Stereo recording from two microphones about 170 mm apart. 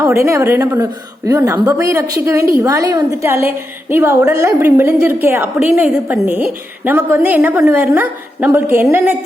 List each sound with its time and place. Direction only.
0.2 s a woman's voice: 15° right (ahead or behind)